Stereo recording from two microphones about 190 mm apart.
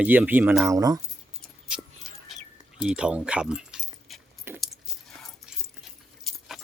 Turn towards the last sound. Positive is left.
turn(degrees=0)  # may be behind; listen again after turning